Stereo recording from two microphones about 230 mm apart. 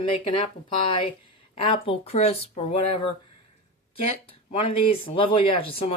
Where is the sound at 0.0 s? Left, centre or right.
Left.